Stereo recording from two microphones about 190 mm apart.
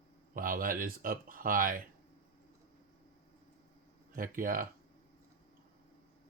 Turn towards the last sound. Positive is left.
turn(degrees=-45)  # may be behind; listen again after turning